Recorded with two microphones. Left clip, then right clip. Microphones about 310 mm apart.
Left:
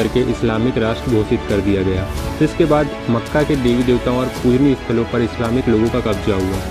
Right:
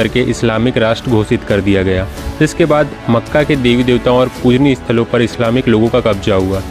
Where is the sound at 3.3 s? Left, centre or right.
Right.